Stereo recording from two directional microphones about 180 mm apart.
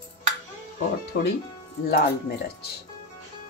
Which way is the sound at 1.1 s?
65° left (ahead or behind).